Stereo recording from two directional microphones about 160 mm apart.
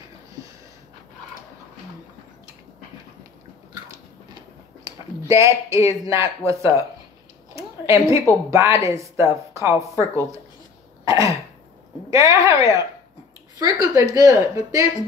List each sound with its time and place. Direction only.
4.8 s a man's voice: 20° right (ahead or behind)
11.1 s a woman's voice: 20° right (ahead or behind)